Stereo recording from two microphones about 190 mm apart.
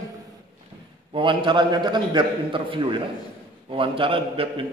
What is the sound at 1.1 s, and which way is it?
A man's voice, 25° right (ahead or behind).